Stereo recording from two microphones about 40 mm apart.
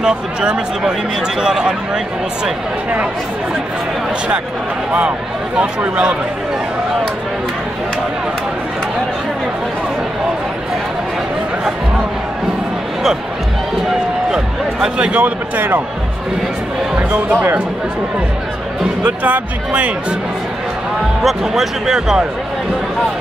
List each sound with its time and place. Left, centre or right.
0.0 s speech: right
15.1 s speech: right
17.1 s speech: right
19.0 s speech: right
21.2 s speech: centre